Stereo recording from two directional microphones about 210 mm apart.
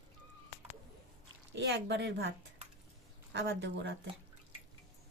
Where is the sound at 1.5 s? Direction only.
55° right (ahead or behind).